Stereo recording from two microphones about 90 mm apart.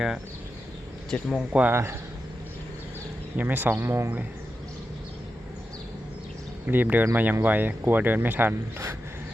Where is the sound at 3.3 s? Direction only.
20° right (ahead or behind).